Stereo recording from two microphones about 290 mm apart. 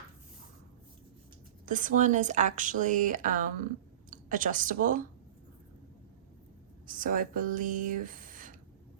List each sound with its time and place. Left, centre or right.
1.6 s a woman's voice: right
6.8 s speech: right